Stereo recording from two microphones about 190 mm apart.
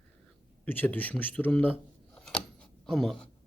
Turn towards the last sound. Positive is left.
turn(degrees=0)  # may be behind; listen again after turning